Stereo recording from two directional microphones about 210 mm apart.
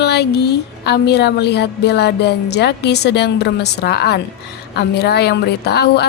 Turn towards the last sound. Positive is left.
turn(degrees=50)  # may be behind; listen again after turning